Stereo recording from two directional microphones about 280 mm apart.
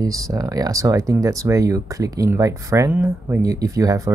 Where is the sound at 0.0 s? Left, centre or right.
Centre.